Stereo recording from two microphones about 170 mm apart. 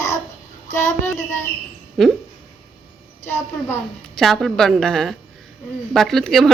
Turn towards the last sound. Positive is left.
turn(degrees=0)  # may be behind; listen again after turning